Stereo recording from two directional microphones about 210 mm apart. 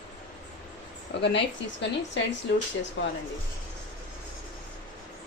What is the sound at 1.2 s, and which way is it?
Speech, 55° left (ahead or behind).